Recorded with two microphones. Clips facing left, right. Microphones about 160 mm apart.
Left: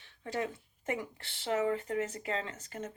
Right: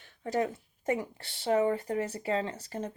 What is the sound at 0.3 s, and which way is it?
Speech, 40° right (ahead or behind).